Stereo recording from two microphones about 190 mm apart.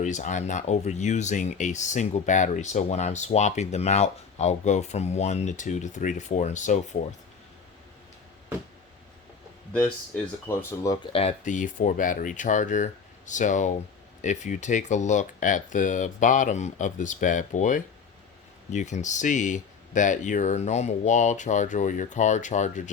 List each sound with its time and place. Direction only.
0.0 s speech: 40° left (ahead or behind)
10.6 s speech: 10° left (ahead or behind)
11.0 s speech: 30° left (ahead or behind)